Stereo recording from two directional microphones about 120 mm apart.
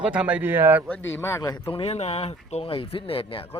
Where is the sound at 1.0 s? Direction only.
20° left (ahead or behind).